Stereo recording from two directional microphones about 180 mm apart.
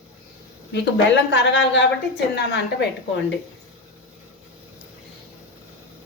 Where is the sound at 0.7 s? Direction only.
75° left (ahead or behind).